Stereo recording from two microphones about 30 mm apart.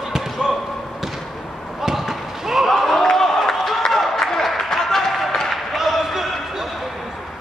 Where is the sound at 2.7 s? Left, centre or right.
Centre.